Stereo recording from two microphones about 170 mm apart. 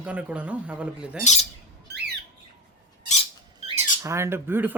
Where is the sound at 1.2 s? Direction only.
40° left (ahead or behind).